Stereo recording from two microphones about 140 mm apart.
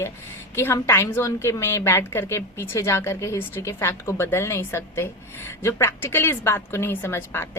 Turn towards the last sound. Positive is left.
turn(degrees=15)  # may be behind; listen again after turning